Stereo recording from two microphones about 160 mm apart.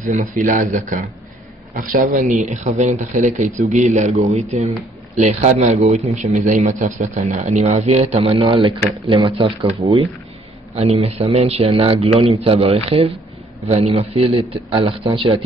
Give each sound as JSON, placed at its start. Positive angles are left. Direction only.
{"t": 0.0, "sound": "a man's voice", "side_deg": -50}
{"t": 9.8, "sound": "speech", "side_deg": -20}
{"t": 10.7, "sound": "a man's voice", "side_deg": -40}